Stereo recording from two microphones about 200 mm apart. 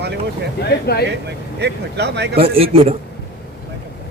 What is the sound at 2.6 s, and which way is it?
Speech, 30° right (ahead or behind).